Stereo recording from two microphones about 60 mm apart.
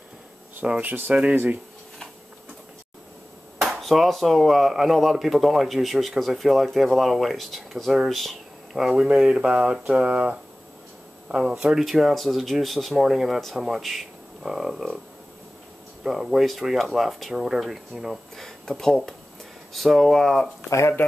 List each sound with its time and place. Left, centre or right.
0.8 s speech: right
3.6 s speech: centre
16.0 s speech: centre